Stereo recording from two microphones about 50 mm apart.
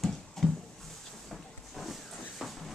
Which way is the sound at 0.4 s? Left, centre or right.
Centre.